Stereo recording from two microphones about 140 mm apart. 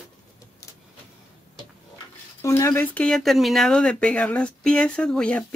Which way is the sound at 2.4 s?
20° left (ahead or behind).